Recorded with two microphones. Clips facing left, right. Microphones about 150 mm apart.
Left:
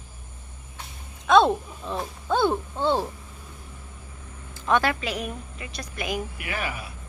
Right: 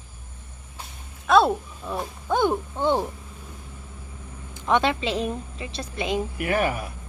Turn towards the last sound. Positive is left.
turn(degrees=-45)  # may be behind; listen again after turning